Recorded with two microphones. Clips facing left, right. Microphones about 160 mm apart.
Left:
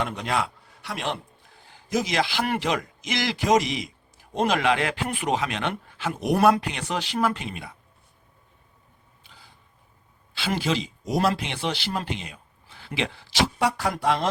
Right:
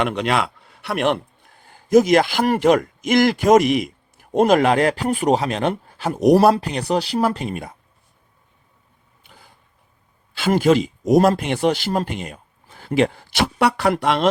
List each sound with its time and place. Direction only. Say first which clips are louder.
0.0 s a man's voice: right 6 dB; 75° right (ahead or behind); by 4.3 s 55° right (ahead or behind)
4.4 s speech: right 8 dB; 45° right (ahead or behind)
9.2 s a sound: right 4 dB; 55° right (ahead or behind)
10.3 s speech: right 10 dB; 50° right (ahead or behind); by 14.3 s 75° right (ahead or behind)